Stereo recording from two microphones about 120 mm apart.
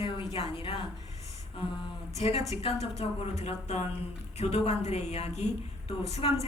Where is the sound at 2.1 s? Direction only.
60° left (ahead or behind).